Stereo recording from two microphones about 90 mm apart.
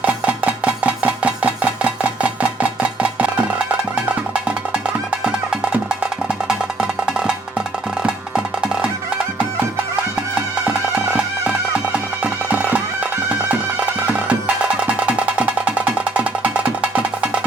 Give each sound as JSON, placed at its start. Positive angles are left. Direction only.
{"t": 0.0, "sound": "a sound", "side_deg": -15}
{"t": 5.2, "sound": "music", "side_deg": -10}
{"t": 12.2, "sound": "music", "side_deg": -15}